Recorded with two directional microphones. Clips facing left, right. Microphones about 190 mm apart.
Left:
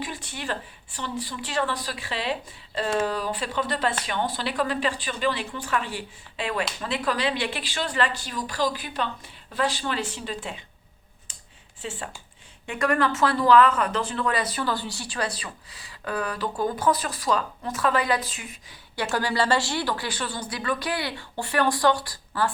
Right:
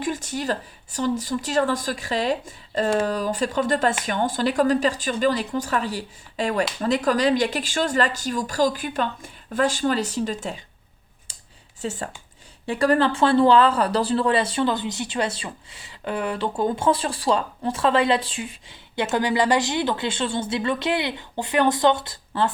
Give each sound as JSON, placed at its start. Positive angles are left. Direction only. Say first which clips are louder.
{"t": 0.0, "sound": "speech", "louder": "right 7 dB", "side_deg": -45}
{"t": 11.8, "sound": "speech", "louder": "right 5 dB", "side_deg": -40}